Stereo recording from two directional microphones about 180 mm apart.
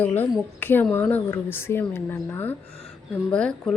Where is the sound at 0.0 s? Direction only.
10° left (ahead or behind).